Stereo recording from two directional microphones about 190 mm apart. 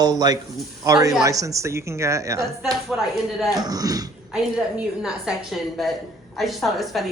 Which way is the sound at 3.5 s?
20° right (ahead or behind).